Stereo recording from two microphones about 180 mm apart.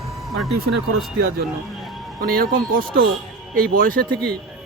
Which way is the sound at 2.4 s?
55° right (ahead or behind).